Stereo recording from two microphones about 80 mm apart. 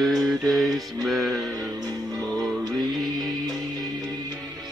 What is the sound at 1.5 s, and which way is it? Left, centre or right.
Music, right.